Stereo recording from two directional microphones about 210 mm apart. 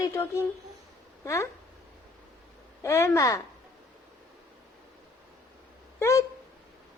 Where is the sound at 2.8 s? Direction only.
10° left (ahead or behind).